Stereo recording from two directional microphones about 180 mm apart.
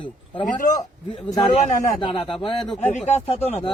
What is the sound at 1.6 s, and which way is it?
Speech, 45° left (ahead or behind).